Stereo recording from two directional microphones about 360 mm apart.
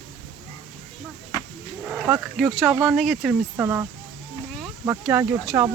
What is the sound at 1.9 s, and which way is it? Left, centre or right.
A child's voice, centre.